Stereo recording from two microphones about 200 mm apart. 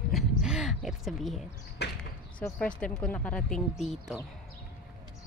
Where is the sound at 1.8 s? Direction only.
60° left (ahead or behind).